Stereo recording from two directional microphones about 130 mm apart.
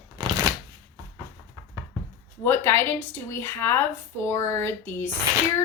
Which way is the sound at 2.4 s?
20° left (ahead or behind).